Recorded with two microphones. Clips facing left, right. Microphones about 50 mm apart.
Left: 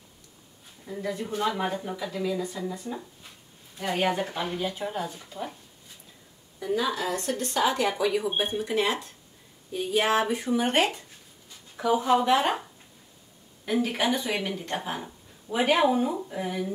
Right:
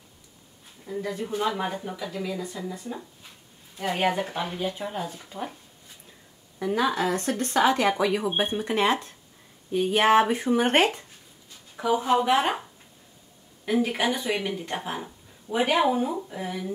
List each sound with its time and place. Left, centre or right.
0.8 s speech: centre
6.9 s speech: right
11.7 s speech: centre
13.7 s speech: centre